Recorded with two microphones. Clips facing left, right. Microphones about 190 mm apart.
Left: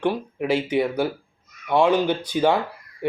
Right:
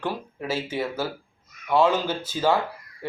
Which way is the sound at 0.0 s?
15° left (ahead or behind).